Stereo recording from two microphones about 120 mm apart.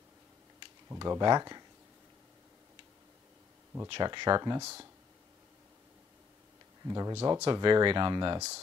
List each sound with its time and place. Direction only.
0.8 s speech: 30° right (ahead or behind)
3.9 s speech: 35° right (ahead or behind)
6.9 s speech: 30° right (ahead or behind)
7.5 s speech: 40° right (ahead or behind)